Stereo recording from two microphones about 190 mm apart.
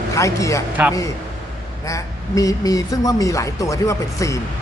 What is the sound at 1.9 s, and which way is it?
Speech, 20° left (ahead or behind).